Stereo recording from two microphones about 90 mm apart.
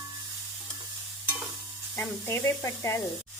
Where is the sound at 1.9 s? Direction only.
25° left (ahead or behind).